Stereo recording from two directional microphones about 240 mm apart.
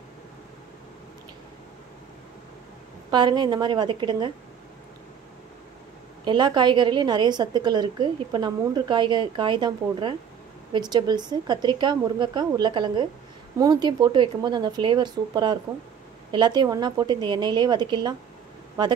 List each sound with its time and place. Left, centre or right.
3.1 s a woman's voice: centre
6.2 s a woman's voice: centre